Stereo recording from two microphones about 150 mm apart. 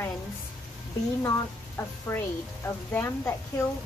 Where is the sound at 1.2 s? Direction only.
20° left (ahead or behind).